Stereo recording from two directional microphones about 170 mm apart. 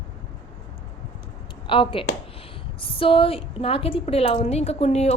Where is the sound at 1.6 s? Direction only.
30° left (ahead or behind).